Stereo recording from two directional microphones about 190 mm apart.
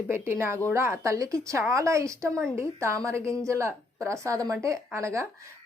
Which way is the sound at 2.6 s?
15° right (ahead or behind).